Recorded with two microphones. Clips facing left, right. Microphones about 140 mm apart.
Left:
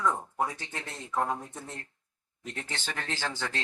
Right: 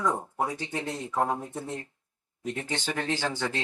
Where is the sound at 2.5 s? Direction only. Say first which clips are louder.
Right 6 dB; 15° right (ahead or behind).